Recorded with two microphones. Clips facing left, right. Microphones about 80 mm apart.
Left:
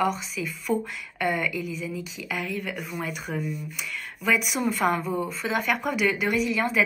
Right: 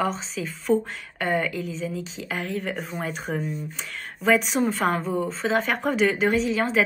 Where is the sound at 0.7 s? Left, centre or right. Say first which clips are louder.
Right 5 dB; left.